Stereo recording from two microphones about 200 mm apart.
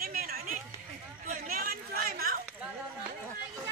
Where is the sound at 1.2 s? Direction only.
45° right (ahead or behind).